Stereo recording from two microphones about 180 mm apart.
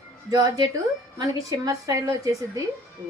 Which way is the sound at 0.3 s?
20° right (ahead or behind).